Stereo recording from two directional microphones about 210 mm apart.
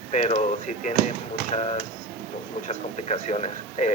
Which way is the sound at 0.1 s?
35° left (ahead or behind).